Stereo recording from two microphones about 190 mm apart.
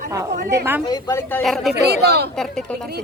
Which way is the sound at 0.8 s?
20° left (ahead or behind).